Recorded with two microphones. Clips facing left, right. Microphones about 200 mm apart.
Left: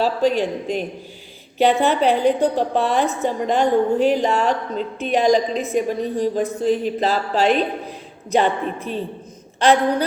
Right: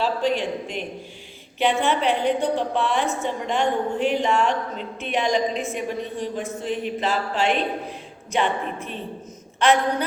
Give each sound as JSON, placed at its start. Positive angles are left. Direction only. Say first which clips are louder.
{"t": 0.0, "sound": "a woman's voice", "louder": "left 4 dB", "side_deg": 40}